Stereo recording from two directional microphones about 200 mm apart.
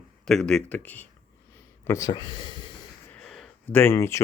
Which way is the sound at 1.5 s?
15° left (ahead or behind).